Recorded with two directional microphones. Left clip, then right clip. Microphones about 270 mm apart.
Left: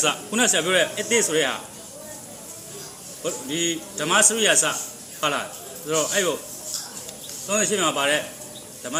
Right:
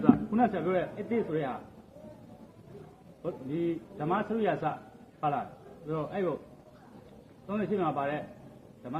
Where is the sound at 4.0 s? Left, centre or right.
Centre.